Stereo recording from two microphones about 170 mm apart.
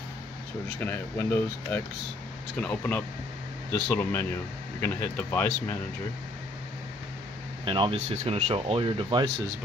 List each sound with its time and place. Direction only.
0.7 s speech: 10° left (ahead or behind)
7.6 s speech: 30° right (ahead or behind)